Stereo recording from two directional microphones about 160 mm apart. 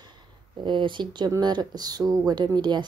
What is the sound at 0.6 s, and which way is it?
A woman's voice, 30° right (ahead or behind).